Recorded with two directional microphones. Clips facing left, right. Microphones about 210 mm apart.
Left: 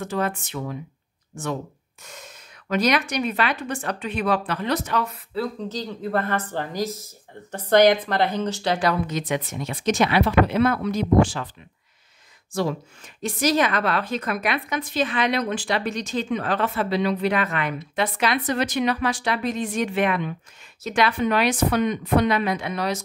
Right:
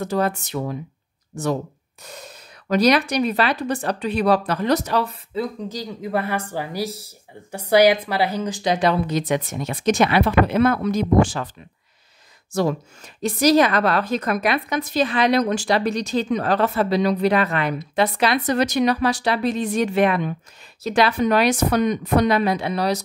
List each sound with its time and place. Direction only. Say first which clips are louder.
0.0 s a woman's voice: right 4 dB; 40° right (ahead or behind)
5.3 s a woman's voice: left 1 dB; 15° right (ahead or behind); by 9.2 s 30° right (ahead or behind)
9.6 s speech: right 2 dB; 50° right (ahead or behind)
12.5 s a woman's voice: right 4 dB; 40° right (ahead or behind)